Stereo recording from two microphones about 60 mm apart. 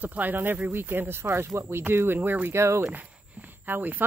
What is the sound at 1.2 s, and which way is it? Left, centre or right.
Speech, right.